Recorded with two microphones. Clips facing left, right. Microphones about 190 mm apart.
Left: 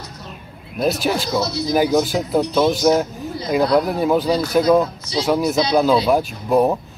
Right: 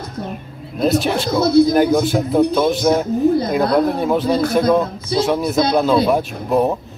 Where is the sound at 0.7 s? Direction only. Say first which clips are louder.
Right 3 dB; centre (ahead or behind).